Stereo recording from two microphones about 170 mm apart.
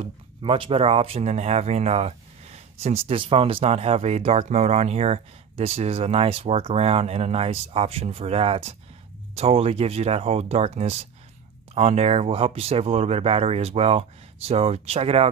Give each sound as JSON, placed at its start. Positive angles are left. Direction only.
{"t": 0.0, "sound": "speech", "side_deg": -30}